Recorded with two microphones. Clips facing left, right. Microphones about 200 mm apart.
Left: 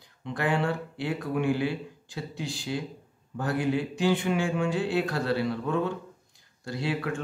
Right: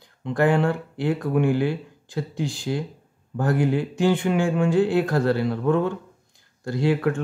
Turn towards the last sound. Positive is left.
turn(degrees=-50)  # may be behind; listen again after turning